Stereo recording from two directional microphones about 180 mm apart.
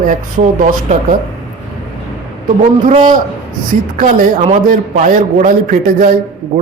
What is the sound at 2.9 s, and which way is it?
Speech, 45° right (ahead or behind).